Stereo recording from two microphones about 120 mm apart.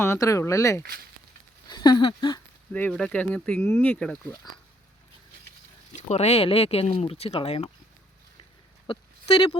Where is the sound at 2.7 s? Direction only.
15° left (ahead or behind).